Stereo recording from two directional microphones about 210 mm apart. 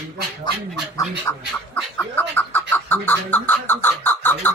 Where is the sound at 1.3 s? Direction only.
10° left (ahead or behind).